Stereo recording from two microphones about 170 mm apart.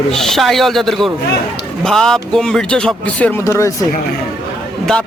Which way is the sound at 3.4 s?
20° left (ahead or behind).